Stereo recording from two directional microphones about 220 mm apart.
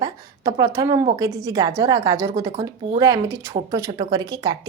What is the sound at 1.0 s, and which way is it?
A woman's voice, 20° right (ahead or behind).